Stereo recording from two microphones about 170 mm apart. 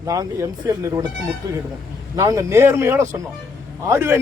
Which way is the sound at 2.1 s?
20° right (ahead or behind).